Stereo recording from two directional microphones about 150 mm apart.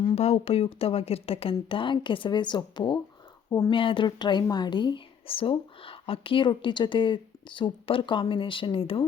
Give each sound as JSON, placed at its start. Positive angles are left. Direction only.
{"t": 0.0, "sound": "speech", "side_deg": 40}